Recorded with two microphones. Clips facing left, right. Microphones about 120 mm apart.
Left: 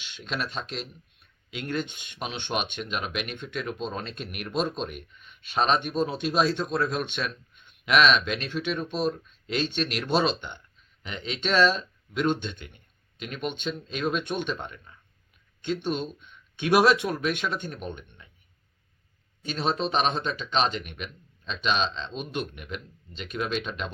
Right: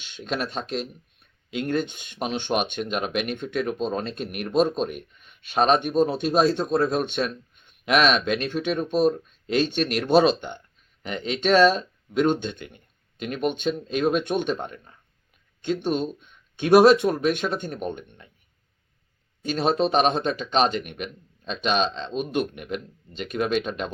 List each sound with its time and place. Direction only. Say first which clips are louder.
0.0 s speech: right 4 dB; 45° right (ahead or behind)
19.4 s speech: right 6 dB; 45° right (ahead or behind)